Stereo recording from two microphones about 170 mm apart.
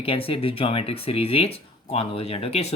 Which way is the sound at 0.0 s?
35° left (ahead or behind).